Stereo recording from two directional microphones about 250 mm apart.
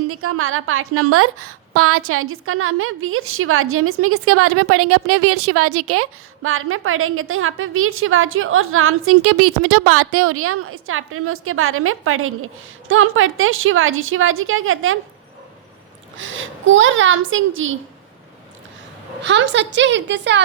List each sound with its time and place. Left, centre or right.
0.1 s a woman's voice: right
16.1 s a woman's voice: right
19.2 s a woman's voice: right